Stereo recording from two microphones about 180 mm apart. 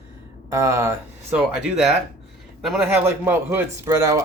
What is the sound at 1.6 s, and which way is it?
A man's voice, 5° right (ahead or behind).